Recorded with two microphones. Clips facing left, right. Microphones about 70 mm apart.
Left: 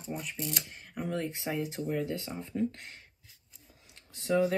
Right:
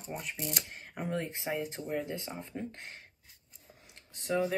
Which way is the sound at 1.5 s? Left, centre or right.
Centre.